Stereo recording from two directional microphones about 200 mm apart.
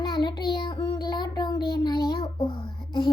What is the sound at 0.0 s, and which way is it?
Child singing, 20° left (ahead or behind).